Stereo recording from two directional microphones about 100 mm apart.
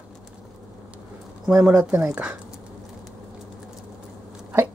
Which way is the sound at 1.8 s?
15° right (ahead or behind).